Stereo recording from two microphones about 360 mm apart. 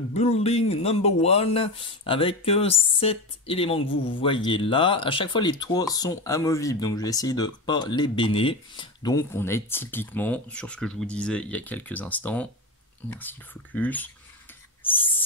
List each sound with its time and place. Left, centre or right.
0.1 s speech: centre
14.8 s owl: centre